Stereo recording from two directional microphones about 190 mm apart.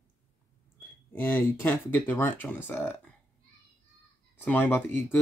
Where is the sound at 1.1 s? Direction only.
10° left (ahead or behind).